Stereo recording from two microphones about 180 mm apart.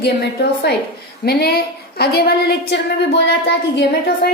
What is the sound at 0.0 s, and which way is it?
A woman's voice, 65° left (ahead or behind).